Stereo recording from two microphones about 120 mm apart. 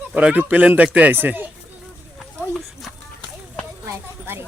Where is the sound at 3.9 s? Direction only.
20° right (ahead or behind).